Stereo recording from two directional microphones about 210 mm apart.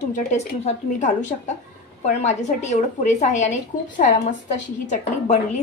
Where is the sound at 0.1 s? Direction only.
35° left (ahead or behind).